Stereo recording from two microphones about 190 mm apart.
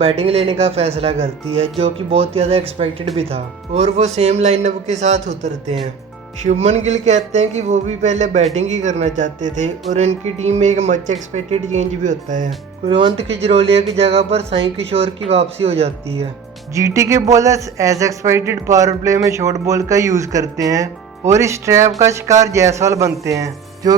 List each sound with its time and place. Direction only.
0.0 s speech: 30° right (ahead or behind)
12.9 s speech: 30° right (ahead or behind)
16.7 s speech: 15° right (ahead or behind)